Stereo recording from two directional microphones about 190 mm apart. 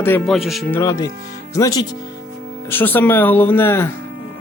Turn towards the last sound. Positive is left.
turn(degrees=10)  # may be behind; listen again after turning